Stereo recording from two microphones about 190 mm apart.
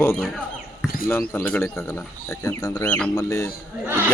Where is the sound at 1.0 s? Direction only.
10° left (ahead or behind).